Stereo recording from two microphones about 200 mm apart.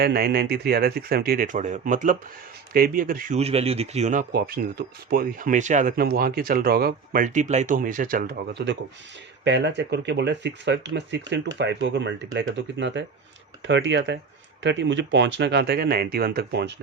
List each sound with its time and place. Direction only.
0.0 s speech: 50° right (ahead or behind)